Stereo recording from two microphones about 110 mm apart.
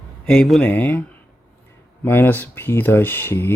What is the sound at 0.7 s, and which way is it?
Speech, 15° left (ahead or behind).